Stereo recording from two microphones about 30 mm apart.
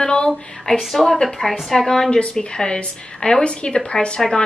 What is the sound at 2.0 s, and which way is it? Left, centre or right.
A woman's voice, left.